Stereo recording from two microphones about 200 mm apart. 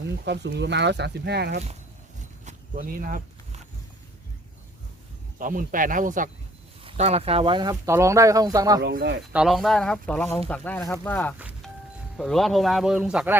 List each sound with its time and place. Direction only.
0.0 s speech: 60° right (ahead or behind)
2.4 s speech: 40° right (ahead or behind)
5.4 s speech: 40° right (ahead or behind); by 8.8 s 20° right (ahead or behind)
8.8 s speech: 50° right (ahead or behind)
9.3 s speech: 5° right (ahead or behind)